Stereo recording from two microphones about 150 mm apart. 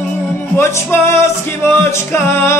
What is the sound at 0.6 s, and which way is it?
Music, 20° left (ahead or behind).